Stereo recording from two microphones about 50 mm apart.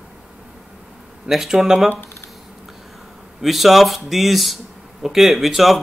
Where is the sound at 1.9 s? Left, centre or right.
Left.